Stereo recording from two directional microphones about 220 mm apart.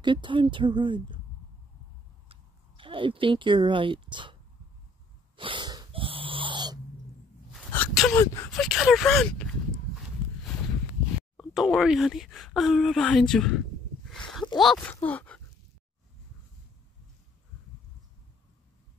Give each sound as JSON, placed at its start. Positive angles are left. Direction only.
{"t": 0.0, "sound": "a woman's voice", "side_deg": -20}
{"t": 2.8, "sound": "speech", "side_deg": -25}
{"t": 5.3, "sound": "dog", "side_deg": -20}
{"t": 7.5, "sound": "a sound", "side_deg": 5}
{"t": 8.5, "sound": "speech", "side_deg": 0}
{"t": 11.3, "sound": "speech", "side_deg": 0}
{"t": 14.6, "sound": "speech", "side_deg": 5}